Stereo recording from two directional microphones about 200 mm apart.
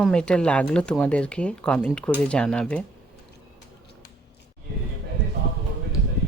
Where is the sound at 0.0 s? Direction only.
5° left (ahead or behind).